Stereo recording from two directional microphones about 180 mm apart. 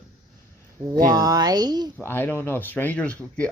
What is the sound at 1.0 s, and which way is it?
Speech, 20° right (ahead or behind).